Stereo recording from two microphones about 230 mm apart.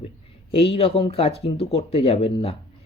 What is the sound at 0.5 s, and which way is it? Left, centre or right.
Speech, left.